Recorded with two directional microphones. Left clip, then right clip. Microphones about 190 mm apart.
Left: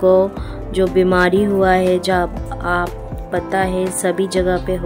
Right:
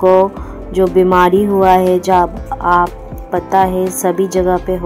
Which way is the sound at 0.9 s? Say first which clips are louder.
Right 4 dB; 20° left (ahead or behind).